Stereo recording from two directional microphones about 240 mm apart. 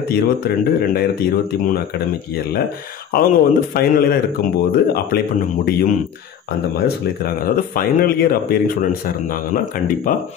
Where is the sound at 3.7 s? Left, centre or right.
Left.